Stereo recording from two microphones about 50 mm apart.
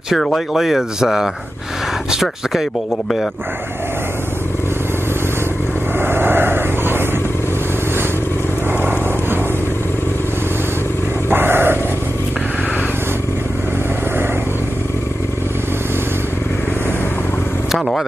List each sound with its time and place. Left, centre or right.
0.6 s speech: centre
5.9 s vehicle: right
11.2 s vehicle: right